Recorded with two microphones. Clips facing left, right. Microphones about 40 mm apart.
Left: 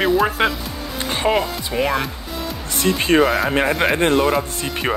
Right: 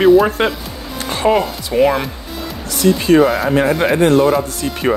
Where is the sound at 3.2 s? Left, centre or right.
Centre.